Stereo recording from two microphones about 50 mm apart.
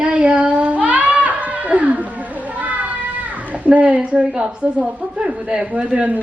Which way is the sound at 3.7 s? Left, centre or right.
Right.